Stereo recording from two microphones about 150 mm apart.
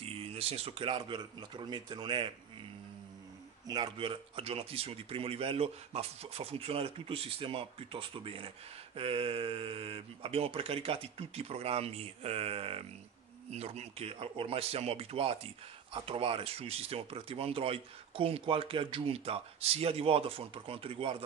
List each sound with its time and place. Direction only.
0.0 s a man's voice: 40° right (ahead or behind)
3.6 s a man's voice: 30° right (ahead or behind)